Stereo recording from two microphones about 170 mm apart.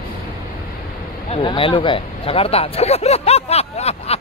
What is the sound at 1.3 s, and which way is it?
Speech, 30° left (ahead or behind).